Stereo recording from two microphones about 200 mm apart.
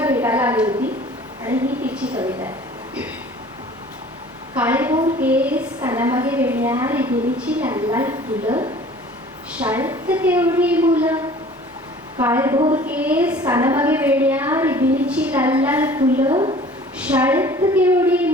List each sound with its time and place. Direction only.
0.0 s a sound: 10° right (ahead or behind)
4.5 s a woman's voice: 10° right (ahead or behind)
9.6 s a woman's voice: 10° right (ahead or behind)
12.2 s a woman's voice: 10° right (ahead or behind)
16.3 s a woman's voice: 25° right (ahead or behind)
17.0 s a woman's voice: 5° right (ahead or behind)